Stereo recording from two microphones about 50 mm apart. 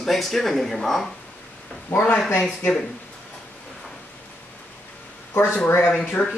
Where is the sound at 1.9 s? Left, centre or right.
Left.